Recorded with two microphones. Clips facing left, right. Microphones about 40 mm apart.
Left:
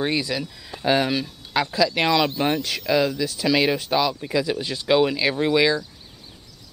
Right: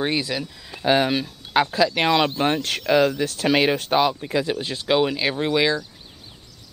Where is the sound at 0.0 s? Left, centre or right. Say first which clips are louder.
Even; centre.